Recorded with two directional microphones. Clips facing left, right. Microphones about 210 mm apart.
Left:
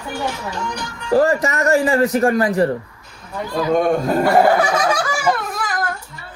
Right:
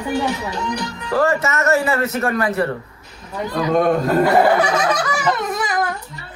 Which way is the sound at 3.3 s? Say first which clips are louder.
Even; 5° left (ahead or behind).